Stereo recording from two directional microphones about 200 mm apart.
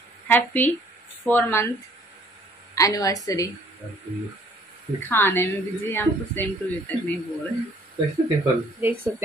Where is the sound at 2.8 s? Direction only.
15° left (ahead or behind).